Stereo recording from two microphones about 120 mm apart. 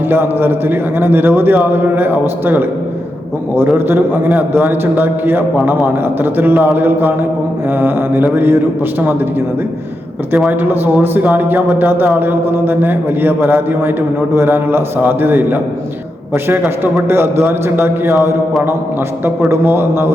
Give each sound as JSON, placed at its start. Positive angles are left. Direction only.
{"t": 0.1, "sound": "a man's voice", "side_deg": -15}
{"t": 3.8, "sound": "a man's voice", "side_deg": -20}
{"t": 10.5, "sound": "a man's voice", "side_deg": -15}
{"t": 19.5, "sound": "a man's voice", "side_deg": -20}